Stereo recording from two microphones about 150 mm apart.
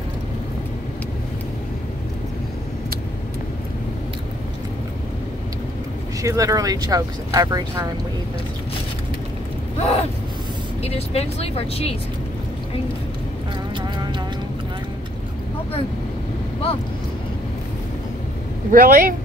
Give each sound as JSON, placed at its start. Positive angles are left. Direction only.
{"t": 6.2, "sound": "speech", "side_deg": -25}
{"t": 9.8, "sound": "a sound", "side_deg": 40}
{"t": 10.8, "sound": "speech", "side_deg": 45}
{"t": 18.7, "sound": "speech", "side_deg": -70}